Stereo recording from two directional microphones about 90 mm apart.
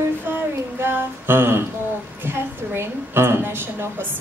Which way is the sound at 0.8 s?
25° right (ahead or behind).